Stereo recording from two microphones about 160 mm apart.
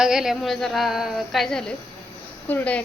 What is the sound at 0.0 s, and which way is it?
A woman's voice, 5° right (ahead or behind).